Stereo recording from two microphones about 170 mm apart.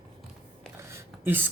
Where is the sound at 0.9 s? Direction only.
10° right (ahead or behind).